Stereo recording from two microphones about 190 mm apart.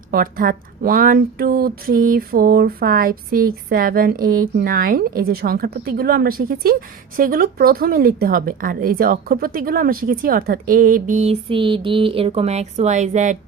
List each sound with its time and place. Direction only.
0.1 s speech: 50° right (ahead or behind)